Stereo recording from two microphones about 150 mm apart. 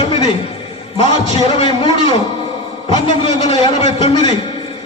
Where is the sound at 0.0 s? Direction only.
30° left (ahead or behind).